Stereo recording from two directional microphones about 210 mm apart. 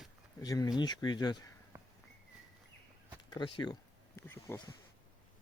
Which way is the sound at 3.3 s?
20° left (ahead or behind).